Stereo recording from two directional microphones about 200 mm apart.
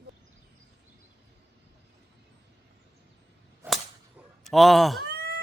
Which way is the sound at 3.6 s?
10° right (ahead or behind).